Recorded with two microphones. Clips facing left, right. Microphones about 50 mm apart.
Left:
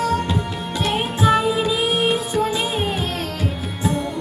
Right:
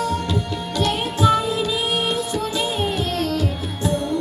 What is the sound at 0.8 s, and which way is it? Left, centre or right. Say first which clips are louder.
Music: even; left.